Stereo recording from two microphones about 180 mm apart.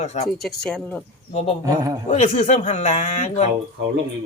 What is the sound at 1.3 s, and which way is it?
Speech, 35° left (ahead or behind).